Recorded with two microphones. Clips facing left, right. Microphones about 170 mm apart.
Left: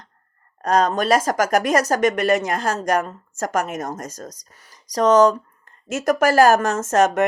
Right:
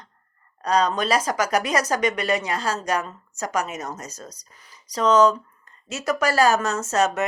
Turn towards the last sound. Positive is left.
turn(degrees=50)  # may be behind; listen again after turning